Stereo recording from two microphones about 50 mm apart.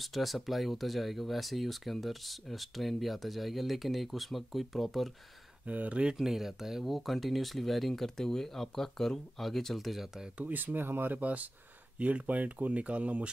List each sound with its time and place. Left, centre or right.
0.0 s speech: centre
5.7 s speech: right
6.1 s speech: centre
10.3 s speech: right